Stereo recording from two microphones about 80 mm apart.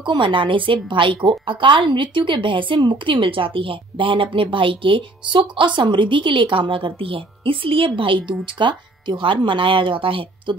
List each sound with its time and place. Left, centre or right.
0.0 s a woman's voice: right